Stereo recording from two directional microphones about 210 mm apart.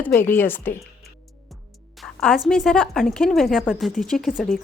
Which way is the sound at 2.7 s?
Centre (ahead or behind).